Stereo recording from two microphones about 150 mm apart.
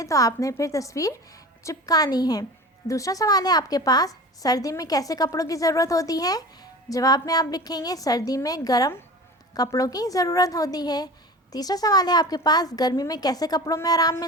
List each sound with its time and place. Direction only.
0.0 s a woman's voice: 20° left (ahead or behind)